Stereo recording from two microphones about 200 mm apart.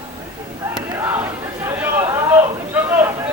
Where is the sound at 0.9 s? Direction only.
10° right (ahead or behind).